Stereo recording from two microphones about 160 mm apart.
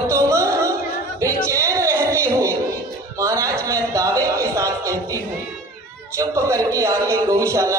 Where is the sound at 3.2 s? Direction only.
20° right (ahead or behind).